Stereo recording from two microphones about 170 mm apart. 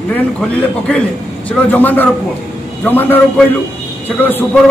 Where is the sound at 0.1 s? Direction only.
5° left (ahead or behind).